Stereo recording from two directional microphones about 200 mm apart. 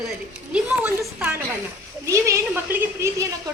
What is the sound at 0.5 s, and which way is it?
A woman's voice, 10° right (ahead or behind).